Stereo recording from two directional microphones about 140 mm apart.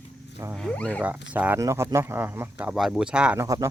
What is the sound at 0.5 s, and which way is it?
Speech, 5° left (ahead or behind).